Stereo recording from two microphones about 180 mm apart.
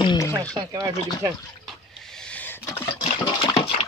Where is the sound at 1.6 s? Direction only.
Centre (ahead or behind).